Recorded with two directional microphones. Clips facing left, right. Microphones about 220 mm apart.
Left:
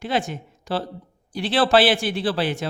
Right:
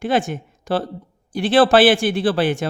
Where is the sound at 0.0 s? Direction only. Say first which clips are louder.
Right 5 dB; 50° right (ahead or behind).